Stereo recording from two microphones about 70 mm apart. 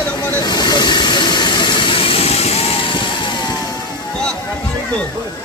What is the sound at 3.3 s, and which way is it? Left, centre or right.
Vehicle, left.